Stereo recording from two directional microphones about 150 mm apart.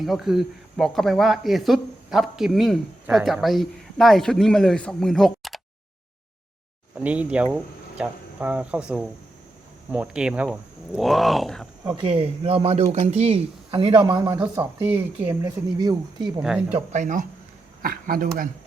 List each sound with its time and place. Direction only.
0.0 s speech: centre (ahead or behind)
6.9 s speech: 10° right (ahead or behind)
11.9 s speech: 35° right (ahead or behind)
14.6 s speech: 15° right (ahead or behind)
15.8 s speech: 25° right (ahead or behind)
16.4 s speech: 5° right (ahead or behind)
16.9 s speech: 55° right (ahead or behind)
17.8 s speech: 70° right (ahead or behind)